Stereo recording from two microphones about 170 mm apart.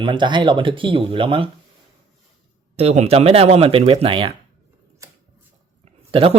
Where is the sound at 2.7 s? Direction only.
40° right (ahead or behind).